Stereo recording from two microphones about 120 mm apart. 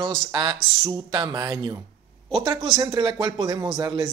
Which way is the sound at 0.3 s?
40° right (ahead or behind).